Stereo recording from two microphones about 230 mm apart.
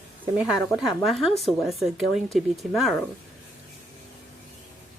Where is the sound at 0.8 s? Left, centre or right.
Centre.